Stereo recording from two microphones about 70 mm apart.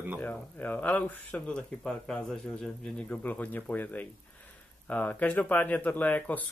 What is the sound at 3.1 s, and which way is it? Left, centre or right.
Speech, left.